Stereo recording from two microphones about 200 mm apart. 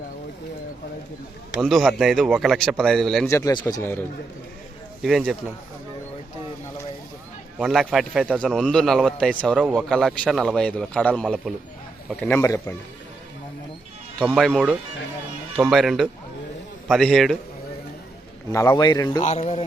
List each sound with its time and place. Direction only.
1.6 s speech: centre (ahead or behind)
3.2 s speech: 15° left (ahead or behind)
5.0 s speech: centre (ahead or behind)
7.6 s speech: centre (ahead or behind)
14.3 s speech: centre (ahead or behind)
18.5 s speech: 15° left (ahead or behind)
19.2 s a man's voice: 35° left (ahead or behind)